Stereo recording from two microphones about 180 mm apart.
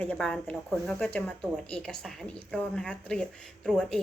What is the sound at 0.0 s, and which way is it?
Speech, 5° left (ahead or behind).